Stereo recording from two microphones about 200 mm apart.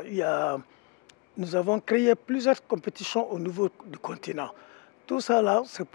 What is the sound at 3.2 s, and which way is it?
A man's voice, 25° left (ahead or behind).